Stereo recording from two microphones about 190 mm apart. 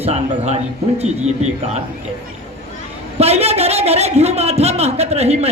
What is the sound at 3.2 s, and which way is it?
A man's voice, 35° right (ahead or behind).